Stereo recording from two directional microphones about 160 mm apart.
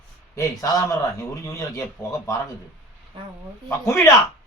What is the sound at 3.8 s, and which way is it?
Speech, 15° left (ahead or behind).